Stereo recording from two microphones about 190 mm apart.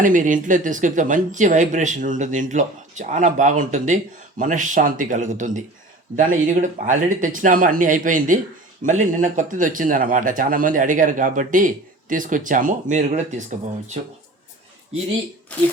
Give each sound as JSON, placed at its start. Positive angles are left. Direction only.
{"t": 0.0, "sound": "speech", "side_deg": -45}